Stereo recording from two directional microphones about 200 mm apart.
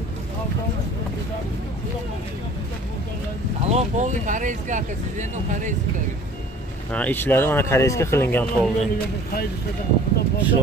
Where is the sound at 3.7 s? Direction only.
35° right (ahead or behind).